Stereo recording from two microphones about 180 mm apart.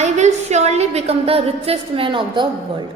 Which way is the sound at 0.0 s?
40° right (ahead or behind).